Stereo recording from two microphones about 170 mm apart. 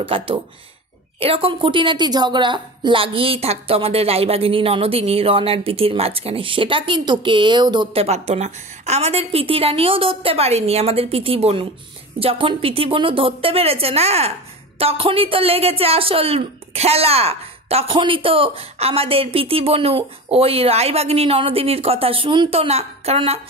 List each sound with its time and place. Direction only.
0.0 s a woman's voice: 30° right (ahead or behind)